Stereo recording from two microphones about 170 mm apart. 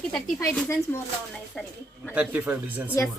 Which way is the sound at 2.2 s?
10° right (ahead or behind).